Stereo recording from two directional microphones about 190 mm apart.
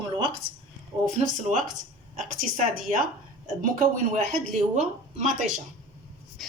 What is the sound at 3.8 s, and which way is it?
Speech, 40° right (ahead or behind).